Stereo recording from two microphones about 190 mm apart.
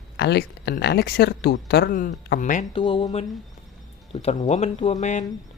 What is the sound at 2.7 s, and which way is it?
Speech, 30° left (ahead or behind).